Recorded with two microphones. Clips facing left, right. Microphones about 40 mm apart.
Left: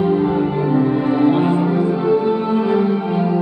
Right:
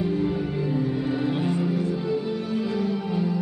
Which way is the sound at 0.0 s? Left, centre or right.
Left.